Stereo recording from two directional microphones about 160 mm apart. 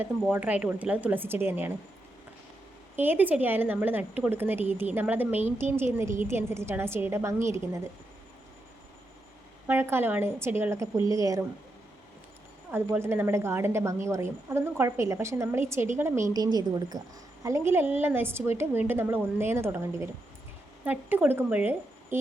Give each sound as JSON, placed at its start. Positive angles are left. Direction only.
{"t": 0.2, "sound": "a woman's voice", "side_deg": -5}
{"t": 2.9, "sound": "a woman's voice", "side_deg": -10}
{"t": 9.6, "sound": "a woman's voice", "side_deg": -15}
{"t": 12.7, "sound": "a woman's voice", "side_deg": -15}